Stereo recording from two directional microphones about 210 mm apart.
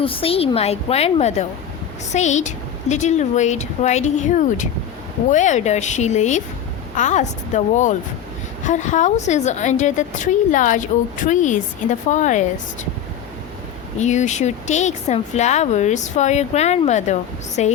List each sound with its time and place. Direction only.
0.0 s a woman's voice: 25° left (ahead or behind)
14.0 s a woman's voice: 35° left (ahead or behind)